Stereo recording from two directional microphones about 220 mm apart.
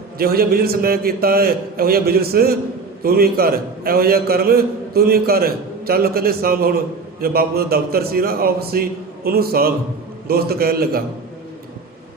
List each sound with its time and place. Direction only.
0.2 s a man's voice: 45° right (ahead or behind)